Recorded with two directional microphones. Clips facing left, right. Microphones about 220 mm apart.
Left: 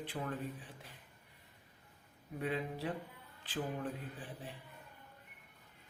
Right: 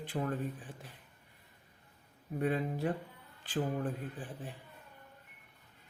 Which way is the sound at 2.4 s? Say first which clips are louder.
Right 5 dB; 45° right (ahead or behind).